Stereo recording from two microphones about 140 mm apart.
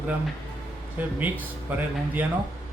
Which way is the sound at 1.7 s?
15° right (ahead or behind).